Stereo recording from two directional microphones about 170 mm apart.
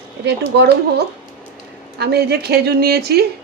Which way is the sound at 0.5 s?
75° right (ahead or behind).